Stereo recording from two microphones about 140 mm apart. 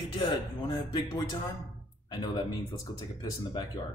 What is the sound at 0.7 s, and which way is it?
Speech, 30° left (ahead or behind).